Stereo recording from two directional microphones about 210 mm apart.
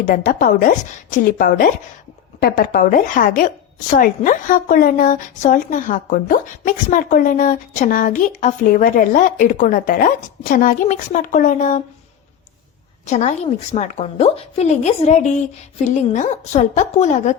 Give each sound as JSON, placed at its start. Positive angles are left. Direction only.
{"t": 0.0, "sound": "a woman's voice", "side_deg": 45}
{"t": 13.1, "sound": "a woman's voice", "side_deg": 35}
{"t": 16.1, "sound": "a woman's voice", "side_deg": 35}